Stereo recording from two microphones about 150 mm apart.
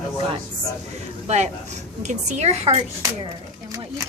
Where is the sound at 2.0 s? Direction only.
55° right (ahead or behind).